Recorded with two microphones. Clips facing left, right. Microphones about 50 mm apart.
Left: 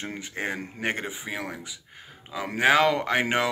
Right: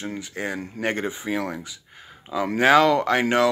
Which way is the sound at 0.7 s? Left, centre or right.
Centre.